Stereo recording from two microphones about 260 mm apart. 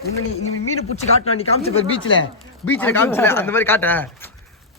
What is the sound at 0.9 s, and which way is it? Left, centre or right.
Speech, left.